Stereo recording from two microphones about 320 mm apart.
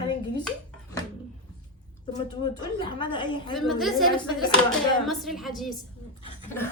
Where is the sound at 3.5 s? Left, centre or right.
Centre.